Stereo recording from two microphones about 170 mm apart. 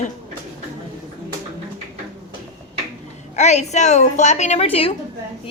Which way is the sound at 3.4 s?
40° left (ahead or behind).